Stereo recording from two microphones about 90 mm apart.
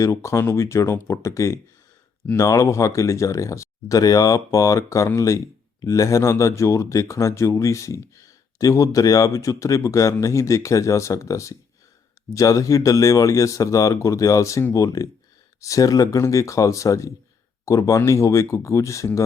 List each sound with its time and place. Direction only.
0.0 s speech: 35° left (ahead or behind)